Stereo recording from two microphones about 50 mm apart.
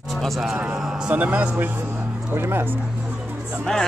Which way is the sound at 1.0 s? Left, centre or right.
Right.